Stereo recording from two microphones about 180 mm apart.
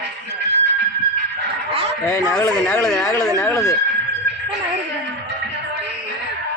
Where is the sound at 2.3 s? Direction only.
5° left (ahead or behind).